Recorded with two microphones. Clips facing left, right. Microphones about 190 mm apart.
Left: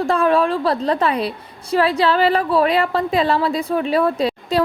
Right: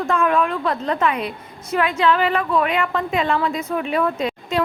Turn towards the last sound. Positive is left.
turn(degrees=35)  # may be behind; listen again after turning